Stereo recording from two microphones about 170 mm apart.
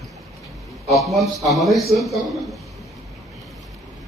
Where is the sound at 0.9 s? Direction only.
Centre (ahead or behind).